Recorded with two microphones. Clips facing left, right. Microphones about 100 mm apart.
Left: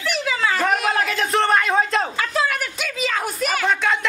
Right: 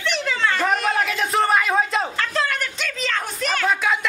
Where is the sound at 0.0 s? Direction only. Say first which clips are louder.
Even; 5° left (ahead or behind).